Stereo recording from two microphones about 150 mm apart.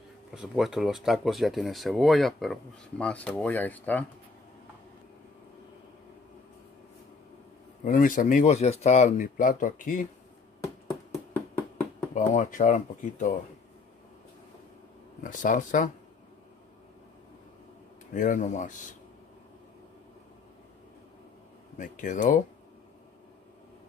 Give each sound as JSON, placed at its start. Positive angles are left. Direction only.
{"t": 0.3, "sound": "speech", "side_deg": -5}
{"t": 7.8, "sound": "speech", "side_deg": 60}
{"t": 12.1, "sound": "speech", "side_deg": 50}
{"t": 15.2, "sound": "speech", "side_deg": 60}
{"t": 18.1, "sound": "speech", "side_deg": 60}
{"t": 21.7, "sound": "speech", "side_deg": 60}